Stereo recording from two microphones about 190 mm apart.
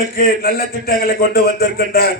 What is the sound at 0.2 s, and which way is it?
A man's voice, 50° left (ahead or behind).